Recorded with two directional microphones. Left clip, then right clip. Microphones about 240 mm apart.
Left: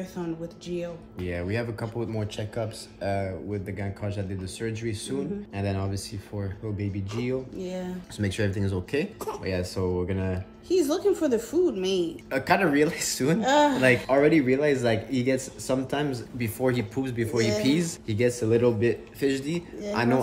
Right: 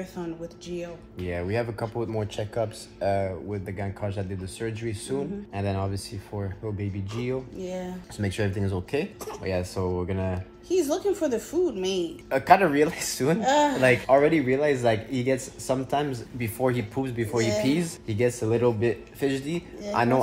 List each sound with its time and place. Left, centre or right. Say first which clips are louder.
0.0 s a woman's voice: even; centre
1.2 s a man's voice: right 2 dB; centre
7.5 s a woman's voice: even; centre
8.2 s speech: even; centre
9.0 s speech: left 2 dB; centre
9.4 s a man's voice: right 2 dB; centre
10.7 s a woman's voice: left 1 dB; centre
12.0 s a man's voice: right 1 dB; centre
13.4 s a woman's voice: left 1 dB; centre
13.7 s speech: right 1 dB; centre
14.0 s a man's voice: right 1 dB; centre